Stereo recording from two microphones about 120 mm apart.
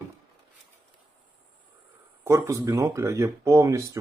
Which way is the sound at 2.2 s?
25° right (ahead or behind).